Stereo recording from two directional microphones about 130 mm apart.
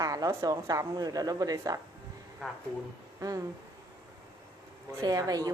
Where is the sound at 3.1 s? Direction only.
25° right (ahead or behind).